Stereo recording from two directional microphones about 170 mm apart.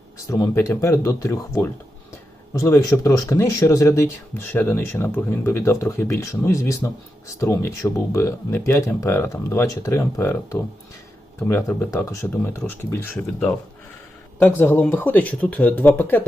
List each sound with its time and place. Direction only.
0.3 s speech: 20° left (ahead or behind)